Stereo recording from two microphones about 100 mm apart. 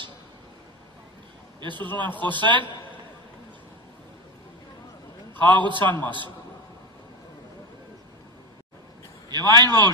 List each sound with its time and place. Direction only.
2.0 s speech: 20° left (ahead or behind)
2.3 s a man's voice: 50° right (ahead or behind)
5.3 s a man's voice: 50° right (ahead or behind)
9.3 s a man's voice: 45° right (ahead or behind)